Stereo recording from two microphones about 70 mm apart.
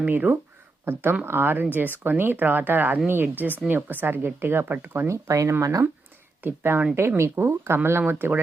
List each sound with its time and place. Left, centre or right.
0.1 s speech: right
5.0 s speech: right
6.4 s speech: right